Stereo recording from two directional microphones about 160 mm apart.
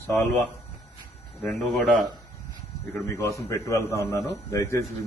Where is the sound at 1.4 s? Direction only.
Centre (ahead or behind).